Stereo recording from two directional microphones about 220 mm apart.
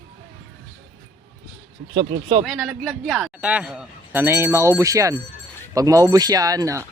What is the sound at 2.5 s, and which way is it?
Speech, centre (ahead or behind).